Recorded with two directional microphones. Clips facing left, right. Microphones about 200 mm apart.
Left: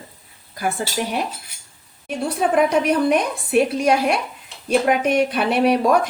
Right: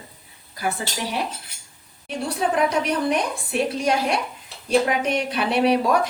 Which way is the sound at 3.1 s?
60° left (ahead or behind).